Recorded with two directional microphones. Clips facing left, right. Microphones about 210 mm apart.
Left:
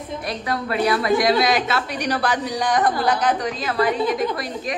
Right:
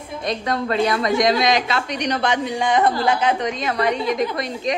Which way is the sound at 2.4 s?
25° right (ahead or behind).